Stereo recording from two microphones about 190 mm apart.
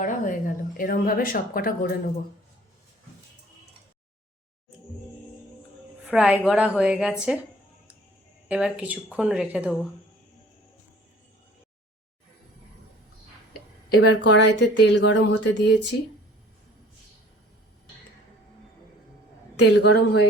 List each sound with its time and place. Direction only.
0.0 s a sound: 45° left (ahead or behind)
0.8 s speech: 50° left (ahead or behind)
6.1 s a woman's voice: 5° right (ahead or behind)
8.4 s a woman's voice: 5° right (ahead or behind)
13.9 s speech: 65° left (ahead or behind)
19.5 s a woman's voice: 65° left (ahead or behind)